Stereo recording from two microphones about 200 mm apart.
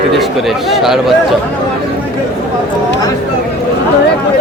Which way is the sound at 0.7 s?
Centre (ahead or behind).